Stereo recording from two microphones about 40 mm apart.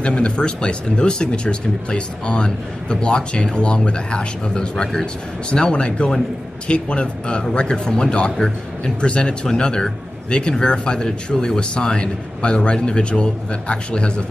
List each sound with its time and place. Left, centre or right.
0.0 s speech: left